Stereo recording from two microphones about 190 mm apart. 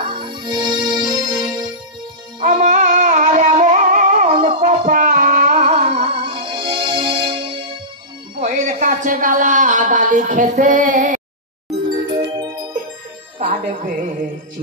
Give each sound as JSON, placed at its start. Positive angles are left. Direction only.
{"t": 0.1, "sound": "music", "side_deg": -25}
{"t": 2.4, "sound": "music", "side_deg": -40}
{"t": 5.9, "sound": "music", "side_deg": -25}
{"t": 8.4, "sound": "a sound", "side_deg": -40}
{"t": 11.7, "sound": "music", "side_deg": -30}
{"t": 13.4, "sound": "music", "side_deg": -45}